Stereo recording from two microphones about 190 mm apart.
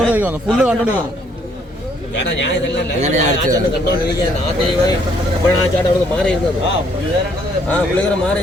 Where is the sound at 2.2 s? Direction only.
65° left (ahead or behind).